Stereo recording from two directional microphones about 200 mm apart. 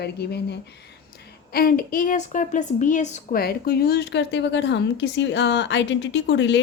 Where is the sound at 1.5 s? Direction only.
45° left (ahead or behind).